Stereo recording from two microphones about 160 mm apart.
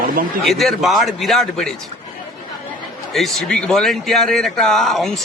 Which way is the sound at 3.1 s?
Centre (ahead or behind).